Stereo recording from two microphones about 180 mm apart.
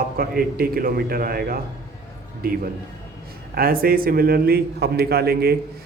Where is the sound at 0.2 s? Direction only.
55° right (ahead or behind).